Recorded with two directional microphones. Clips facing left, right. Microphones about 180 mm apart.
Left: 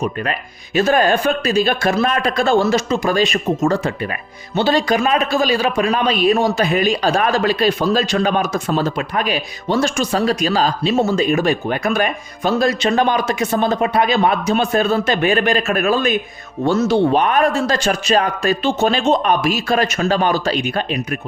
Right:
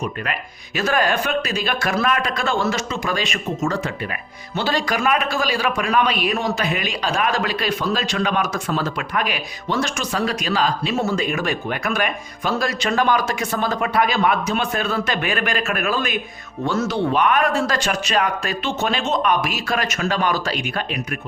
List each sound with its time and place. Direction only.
0.0 s a man's voice: 30° left (ahead or behind)